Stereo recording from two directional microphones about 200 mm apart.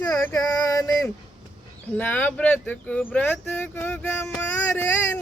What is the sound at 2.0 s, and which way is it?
Music, 10° left (ahead or behind).